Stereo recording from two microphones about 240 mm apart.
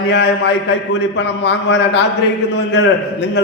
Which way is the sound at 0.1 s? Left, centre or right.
Left.